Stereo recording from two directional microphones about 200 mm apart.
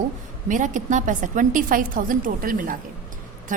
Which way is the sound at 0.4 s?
40° right (ahead or behind).